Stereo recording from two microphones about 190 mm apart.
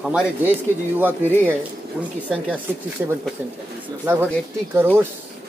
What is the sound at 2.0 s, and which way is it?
Speech, 5° right (ahead or behind).